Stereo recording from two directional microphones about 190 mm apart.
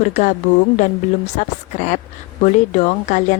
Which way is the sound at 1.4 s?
40° left (ahead or behind).